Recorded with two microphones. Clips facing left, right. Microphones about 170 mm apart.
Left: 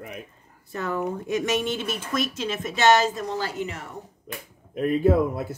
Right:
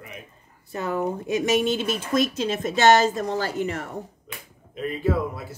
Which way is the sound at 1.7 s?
90° right.